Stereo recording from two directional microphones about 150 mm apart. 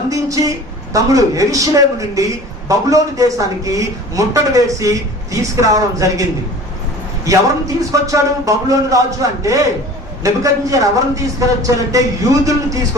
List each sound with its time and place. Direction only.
0.1 s a man's voice: 20° right (ahead or behind)
7.3 s a man's voice: 20° right (ahead or behind)